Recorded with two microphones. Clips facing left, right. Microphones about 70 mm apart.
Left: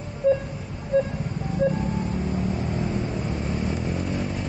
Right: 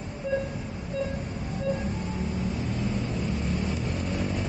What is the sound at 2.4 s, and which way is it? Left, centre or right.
Vehicle, left.